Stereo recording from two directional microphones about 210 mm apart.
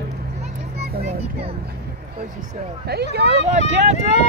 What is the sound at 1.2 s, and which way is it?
Speech, 30° right (ahead or behind).